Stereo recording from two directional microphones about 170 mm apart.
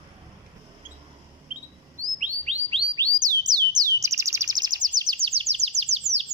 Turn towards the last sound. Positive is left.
turn(degrees=-40)  # may be behind; listen again after turning